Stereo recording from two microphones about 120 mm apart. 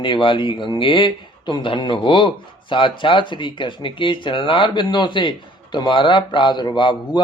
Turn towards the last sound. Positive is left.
turn(degrees=35)  # may be behind; listen again after turning